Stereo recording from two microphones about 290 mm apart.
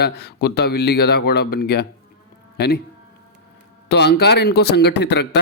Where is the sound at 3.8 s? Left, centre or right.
Left.